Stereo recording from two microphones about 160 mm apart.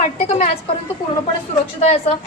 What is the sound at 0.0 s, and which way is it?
Speech, 50° left (ahead or behind).